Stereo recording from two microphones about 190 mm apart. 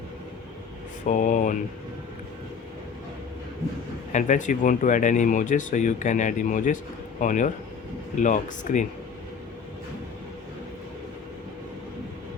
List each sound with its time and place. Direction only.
1.0 s speech: 45° left (ahead or behind)
4.1 s speech: 40° left (ahead or behind)